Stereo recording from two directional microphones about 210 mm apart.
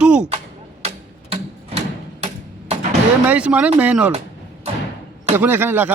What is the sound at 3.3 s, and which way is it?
Speech, 5° right (ahead or behind).